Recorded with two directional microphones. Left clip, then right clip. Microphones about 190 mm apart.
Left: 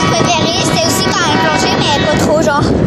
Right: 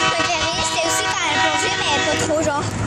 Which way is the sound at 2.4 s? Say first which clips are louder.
Left 8 dB; 35° left (ahead or behind).